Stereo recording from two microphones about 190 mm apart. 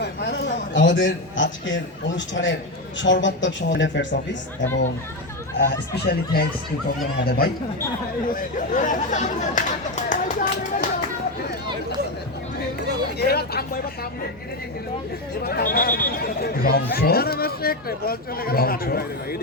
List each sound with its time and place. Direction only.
0.0 s a man's voice: 60° left (ahead or behind)
5.5 s speech: 60° left (ahead or behind)
8.4 s speech: 40° left (ahead or behind)
13.1 s speech: 55° left (ahead or behind)
15.4 s speech: 55° left (ahead or behind)